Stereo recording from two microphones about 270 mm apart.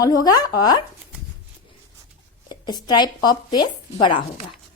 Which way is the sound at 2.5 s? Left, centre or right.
Centre.